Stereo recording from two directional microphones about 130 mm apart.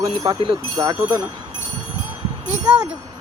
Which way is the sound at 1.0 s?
15° right (ahead or behind).